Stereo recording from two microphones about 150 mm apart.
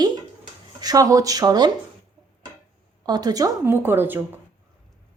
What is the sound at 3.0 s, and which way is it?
Speech, 25° right (ahead or behind).